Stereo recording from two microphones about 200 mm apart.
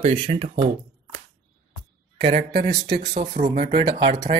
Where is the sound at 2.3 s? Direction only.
55° right (ahead or behind).